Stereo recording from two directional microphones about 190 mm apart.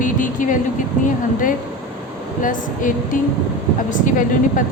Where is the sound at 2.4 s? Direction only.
45° left (ahead or behind).